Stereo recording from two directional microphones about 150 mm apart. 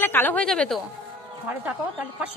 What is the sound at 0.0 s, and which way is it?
Speech, 15° left (ahead or behind).